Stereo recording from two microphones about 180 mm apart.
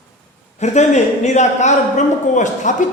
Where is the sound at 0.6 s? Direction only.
40° left (ahead or behind).